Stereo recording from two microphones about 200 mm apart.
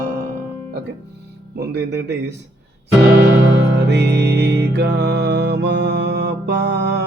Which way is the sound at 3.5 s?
60° right (ahead or behind).